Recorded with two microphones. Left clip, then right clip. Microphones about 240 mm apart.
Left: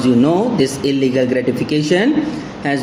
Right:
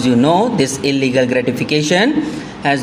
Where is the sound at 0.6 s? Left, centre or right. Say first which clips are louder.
Even; right.